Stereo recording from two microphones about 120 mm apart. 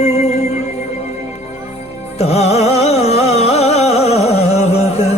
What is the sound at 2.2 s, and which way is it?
Music, 60° left (ahead or behind).